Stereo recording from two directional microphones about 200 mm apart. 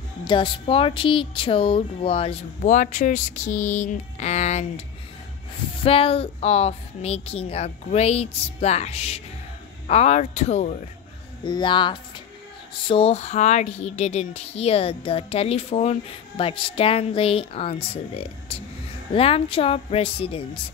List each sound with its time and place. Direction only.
0.2 s speech: 25° left (ahead or behind)
11.4 s speech: 20° left (ahead or behind)